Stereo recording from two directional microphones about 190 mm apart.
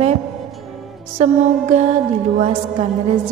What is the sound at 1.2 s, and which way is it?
Music, 35° right (ahead or behind).